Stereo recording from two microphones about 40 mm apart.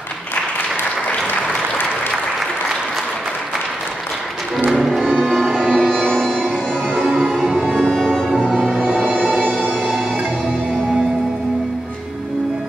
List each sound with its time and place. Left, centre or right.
4.6 s music: centre
6.4 s music: right
7.9 s music: centre